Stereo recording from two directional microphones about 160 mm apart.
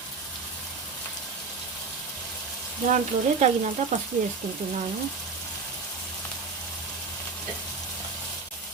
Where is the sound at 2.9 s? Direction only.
45° right (ahead or behind).